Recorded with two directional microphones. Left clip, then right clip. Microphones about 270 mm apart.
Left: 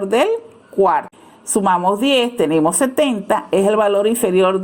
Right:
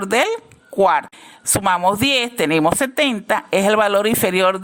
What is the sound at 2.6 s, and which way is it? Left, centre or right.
A woman's voice, right.